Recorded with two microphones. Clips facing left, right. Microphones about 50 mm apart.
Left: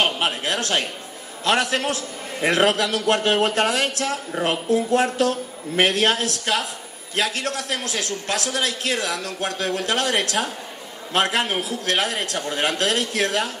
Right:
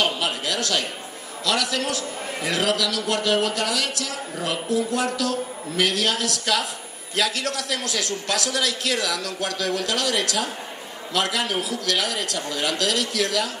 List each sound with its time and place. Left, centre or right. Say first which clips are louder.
0.0 s a man's voice: left 2 dB; left